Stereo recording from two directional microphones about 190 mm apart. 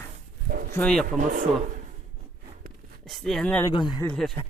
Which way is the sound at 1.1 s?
45° right (ahead or behind).